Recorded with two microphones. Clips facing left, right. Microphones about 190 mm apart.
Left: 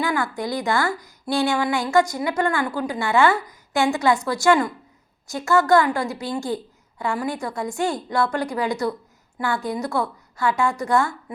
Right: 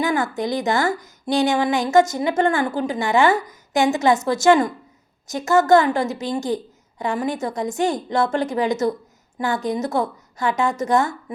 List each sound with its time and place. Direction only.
0.0 s speech: 20° right (ahead or behind)